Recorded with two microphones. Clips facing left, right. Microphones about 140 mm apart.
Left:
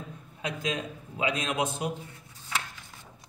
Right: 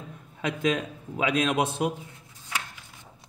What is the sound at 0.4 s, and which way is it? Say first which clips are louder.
Speech: right 6 dB; 55° right (ahead or behind).